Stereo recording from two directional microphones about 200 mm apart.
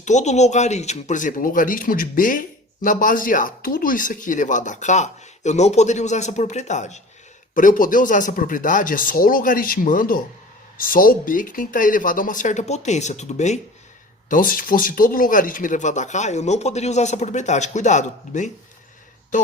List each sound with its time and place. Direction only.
0.0 s speech: 35° left (ahead or behind)